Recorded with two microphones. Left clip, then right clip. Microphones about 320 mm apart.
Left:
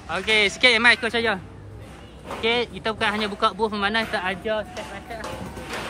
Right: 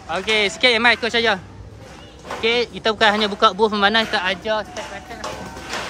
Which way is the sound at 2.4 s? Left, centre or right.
Centre.